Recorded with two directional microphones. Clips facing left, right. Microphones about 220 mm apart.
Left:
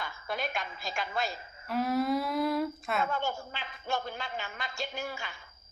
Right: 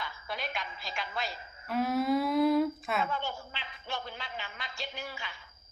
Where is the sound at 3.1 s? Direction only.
45° left (ahead or behind).